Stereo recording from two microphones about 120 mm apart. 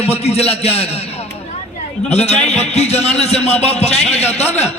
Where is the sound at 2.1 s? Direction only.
65° left (ahead or behind).